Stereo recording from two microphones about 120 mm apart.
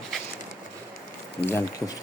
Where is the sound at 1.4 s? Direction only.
25° left (ahead or behind).